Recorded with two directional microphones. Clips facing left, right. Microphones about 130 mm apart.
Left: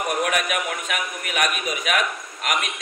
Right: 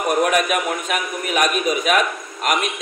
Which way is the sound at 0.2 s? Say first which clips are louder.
Right 5 dB; 35° right (ahead or behind).